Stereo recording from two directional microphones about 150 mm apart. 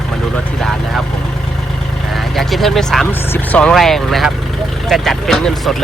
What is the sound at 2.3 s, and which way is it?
Vehicle, centre (ahead or behind).